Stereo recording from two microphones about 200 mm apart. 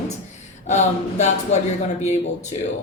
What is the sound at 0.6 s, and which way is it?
Speech, 35° left (ahead or behind).